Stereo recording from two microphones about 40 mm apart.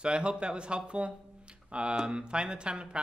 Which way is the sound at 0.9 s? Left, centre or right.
Right.